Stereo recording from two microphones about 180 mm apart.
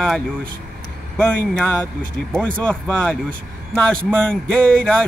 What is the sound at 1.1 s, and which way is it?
A man's voice, 5° left (ahead or behind).